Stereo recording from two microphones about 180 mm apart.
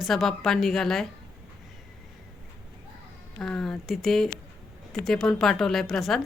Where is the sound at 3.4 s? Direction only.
Centre (ahead or behind).